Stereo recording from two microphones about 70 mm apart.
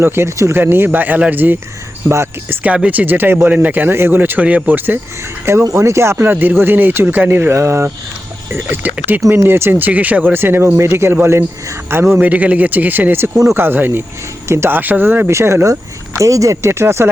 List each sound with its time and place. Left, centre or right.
0.0 s speech: right
0.6 s speech: right
2.0 s speech: right
2.6 s speech: centre
5.7 s speech: right
8.5 s speech: right
12.2 s speech: right
13.3 s speech: right
13.6 s speech: right
14.8 s speech: right
15.3 s speech: right